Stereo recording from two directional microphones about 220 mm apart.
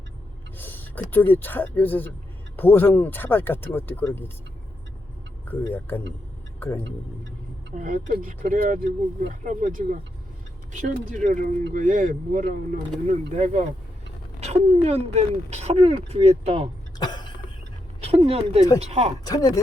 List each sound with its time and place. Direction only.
0.5 s speech: 10° left (ahead or behind)
5.5 s speech: 10° left (ahead or behind)
7.8 s speech: 35° right (ahead or behind)
17.0 s cough: 20° left (ahead or behind)
18.2 s speech: 25° right (ahead or behind)
19.2 s speech: 15° left (ahead or behind)